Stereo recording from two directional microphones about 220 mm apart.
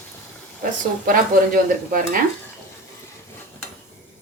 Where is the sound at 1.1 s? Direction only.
40° right (ahead or behind).